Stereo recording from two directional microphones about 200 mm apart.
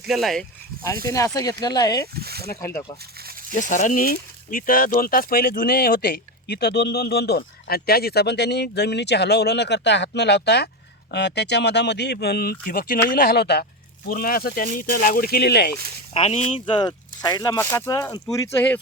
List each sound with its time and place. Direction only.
0.0 s speech: centre (ahead or behind)
1.0 s speech: 15° left (ahead or behind)
2.1 s a sound: 50° right (ahead or behind)
2.6 s speech: 15° left (ahead or behind)
3.5 s speech: 40° left (ahead or behind)
16.1 s speech: 30° left (ahead or behind); by 18.8 s 10° left (ahead or behind)